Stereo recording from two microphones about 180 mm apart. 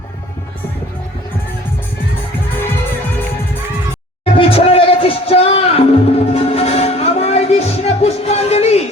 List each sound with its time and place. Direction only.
4.4 s music: 30° left (ahead or behind)